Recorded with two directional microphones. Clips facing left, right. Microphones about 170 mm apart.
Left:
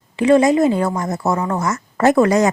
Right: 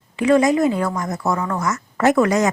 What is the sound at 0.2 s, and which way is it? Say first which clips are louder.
A woman's voice: left 3 dB; 30° left (ahead or behind).